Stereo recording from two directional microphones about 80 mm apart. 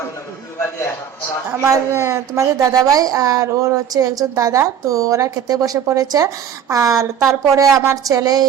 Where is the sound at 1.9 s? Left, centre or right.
Right.